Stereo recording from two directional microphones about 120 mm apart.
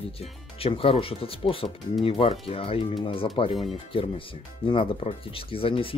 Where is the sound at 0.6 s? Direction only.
50° left (ahead or behind).